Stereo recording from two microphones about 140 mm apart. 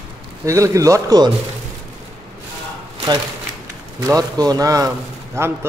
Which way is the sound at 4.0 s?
25° right (ahead or behind).